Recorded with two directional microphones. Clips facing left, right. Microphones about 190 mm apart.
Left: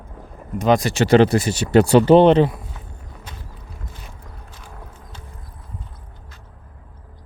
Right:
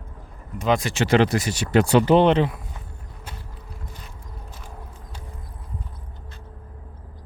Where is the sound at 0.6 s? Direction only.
40° left (ahead or behind).